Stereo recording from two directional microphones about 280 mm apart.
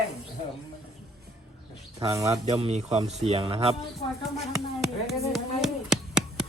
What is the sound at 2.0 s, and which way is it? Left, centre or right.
Speech, centre.